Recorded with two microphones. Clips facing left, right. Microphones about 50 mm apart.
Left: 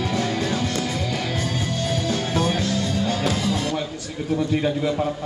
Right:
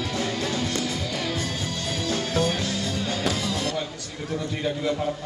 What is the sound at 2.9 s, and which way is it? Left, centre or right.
Music, centre.